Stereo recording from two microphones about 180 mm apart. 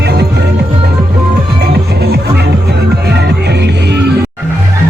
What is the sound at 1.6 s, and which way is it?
Music, 65° right (ahead or behind).